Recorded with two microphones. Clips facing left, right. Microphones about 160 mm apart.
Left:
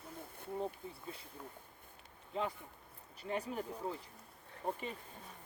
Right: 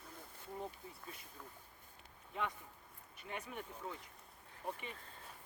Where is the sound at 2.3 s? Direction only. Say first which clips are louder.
Left 4 dB; 30° left (ahead or behind).